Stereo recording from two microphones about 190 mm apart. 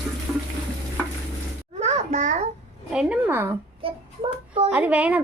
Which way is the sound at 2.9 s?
5° right (ahead or behind).